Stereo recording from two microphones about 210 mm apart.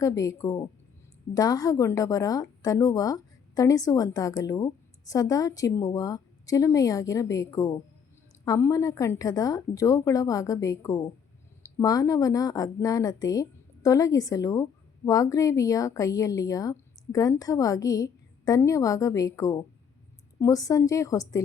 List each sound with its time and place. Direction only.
0.0 s a woman's voice: 15° left (ahead or behind)